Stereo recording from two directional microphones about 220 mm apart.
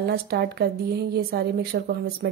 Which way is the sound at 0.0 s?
45° right (ahead or behind).